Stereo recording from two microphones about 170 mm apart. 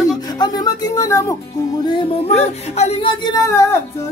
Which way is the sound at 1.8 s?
35° left (ahead or behind).